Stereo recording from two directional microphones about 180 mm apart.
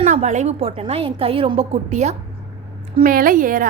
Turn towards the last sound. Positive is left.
turn(degrees=-50)  # may be behind; listen again after turning